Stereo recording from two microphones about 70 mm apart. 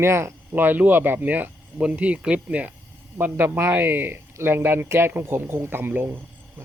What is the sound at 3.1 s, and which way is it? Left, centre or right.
Speech, right.